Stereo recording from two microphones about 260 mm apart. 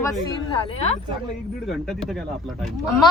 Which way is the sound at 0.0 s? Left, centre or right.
Centre.